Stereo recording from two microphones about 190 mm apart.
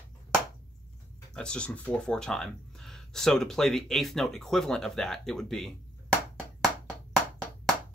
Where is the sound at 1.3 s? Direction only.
5° left (ahead or behind).